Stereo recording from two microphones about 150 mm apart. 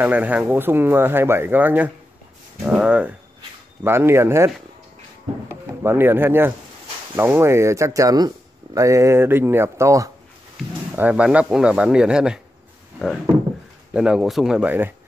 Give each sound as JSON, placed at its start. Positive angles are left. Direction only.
{"t": 0.0, "sound": "speech", "side_deg": -10}
{"t": 5.8, "sound": "speech", "side_deg": -15}
{"t": 11.0, "sound": "speech", "side_deg": -10}
{"t": 13.9, "sound": "speech", "side_deg": -5}